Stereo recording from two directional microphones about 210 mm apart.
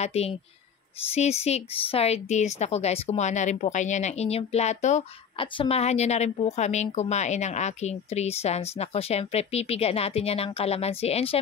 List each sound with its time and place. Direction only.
0.0 s a woman's voice: 30° left (ahead or behind)